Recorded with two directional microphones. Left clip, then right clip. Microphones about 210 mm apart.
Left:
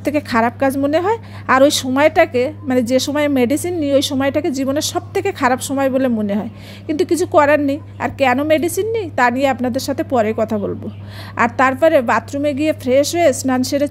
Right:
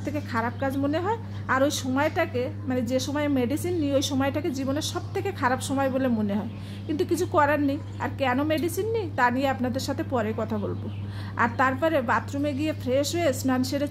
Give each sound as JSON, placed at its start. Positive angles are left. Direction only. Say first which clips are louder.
{"t": 0.0, "sound": "a woman's voice", "louder": "left 12 dB", "side_deg": 40}